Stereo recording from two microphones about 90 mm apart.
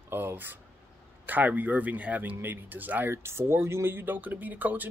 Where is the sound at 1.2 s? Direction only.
20° right (ahead or behind).